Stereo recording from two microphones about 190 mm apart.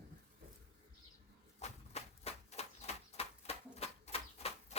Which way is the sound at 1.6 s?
35° left (ahead or behind).